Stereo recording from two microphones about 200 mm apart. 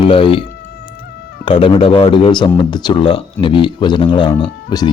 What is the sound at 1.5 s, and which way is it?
Speech, 25° left (ahead or behind).